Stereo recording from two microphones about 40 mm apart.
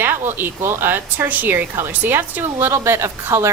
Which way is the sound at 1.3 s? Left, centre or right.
Right.